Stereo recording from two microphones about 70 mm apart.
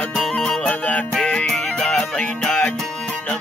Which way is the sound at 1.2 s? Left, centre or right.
Left.